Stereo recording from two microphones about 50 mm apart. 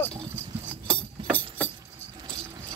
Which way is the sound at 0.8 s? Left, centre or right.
Centre.